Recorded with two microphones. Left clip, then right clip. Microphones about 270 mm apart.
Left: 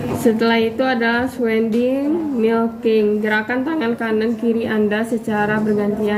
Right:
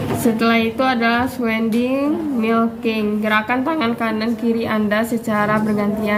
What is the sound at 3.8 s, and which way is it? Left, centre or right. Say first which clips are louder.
Speech: left 1 dB; right.